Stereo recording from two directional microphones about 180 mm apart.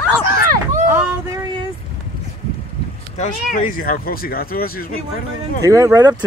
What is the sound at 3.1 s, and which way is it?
Speech, 40° left (ahead or behind).